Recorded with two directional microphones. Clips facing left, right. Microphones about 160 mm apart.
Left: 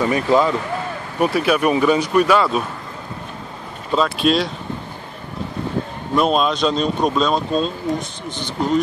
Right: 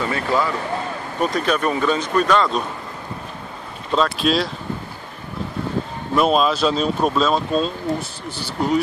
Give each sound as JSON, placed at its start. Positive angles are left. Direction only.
{"t": 0.0, "sound": "speech", "side_deg": 15}
{"t": 3.9, "sound": "speech", "side_deg": 0}
{"t": 6.1, "sound": "speech", "side_deg": 0}